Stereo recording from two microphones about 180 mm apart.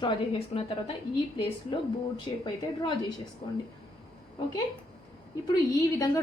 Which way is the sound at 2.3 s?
30° left (ahead or behind).